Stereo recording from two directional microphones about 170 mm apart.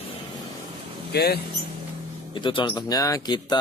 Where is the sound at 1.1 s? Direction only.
70° left (ahead or behind).